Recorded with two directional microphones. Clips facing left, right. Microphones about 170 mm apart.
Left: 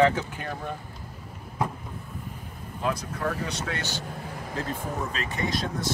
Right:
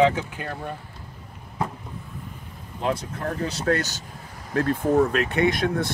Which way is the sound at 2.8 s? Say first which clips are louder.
Right 3 dB; 25° right (ahead or behind).